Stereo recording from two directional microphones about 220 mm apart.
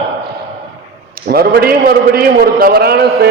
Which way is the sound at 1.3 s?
45° right (ahead or behind).